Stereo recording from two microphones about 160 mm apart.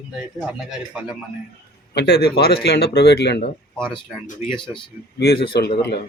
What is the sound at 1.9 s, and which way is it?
A man's voice, 85° left.